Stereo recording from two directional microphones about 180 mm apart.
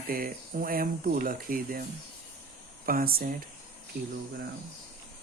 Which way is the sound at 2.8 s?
55° right (ahead or behind).